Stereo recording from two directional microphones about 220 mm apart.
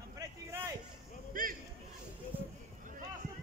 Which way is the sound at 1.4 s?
40° right (ahead or behind).